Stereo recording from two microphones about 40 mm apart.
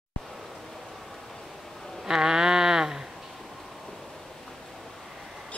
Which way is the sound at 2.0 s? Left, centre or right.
Centre.